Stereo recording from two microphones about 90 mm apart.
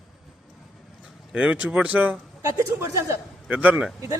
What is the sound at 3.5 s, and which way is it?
Speech, 15° right (ahead or behind).